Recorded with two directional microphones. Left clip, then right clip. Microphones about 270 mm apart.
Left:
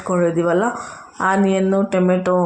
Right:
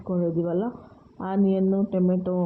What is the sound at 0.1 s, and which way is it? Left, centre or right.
Speech, centre.